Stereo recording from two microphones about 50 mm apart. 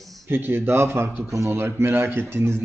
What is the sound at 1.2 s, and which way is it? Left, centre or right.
Speech, right.